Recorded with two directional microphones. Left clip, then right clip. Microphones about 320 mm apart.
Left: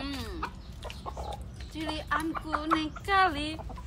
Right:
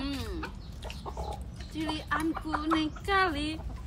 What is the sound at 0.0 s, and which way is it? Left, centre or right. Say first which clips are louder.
Chicken: even; centre.